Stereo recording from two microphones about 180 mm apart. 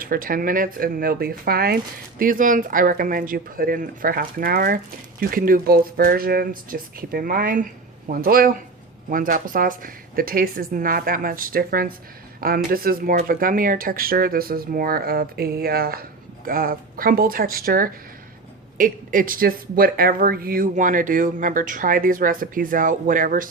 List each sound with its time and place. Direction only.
0.0 s speech: 50° right (ahead or behind)